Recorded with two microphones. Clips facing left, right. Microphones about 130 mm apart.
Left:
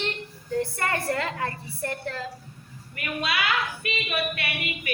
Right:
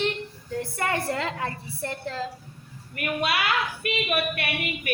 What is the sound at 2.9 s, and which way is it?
Speech, 50° right (ahead or behind).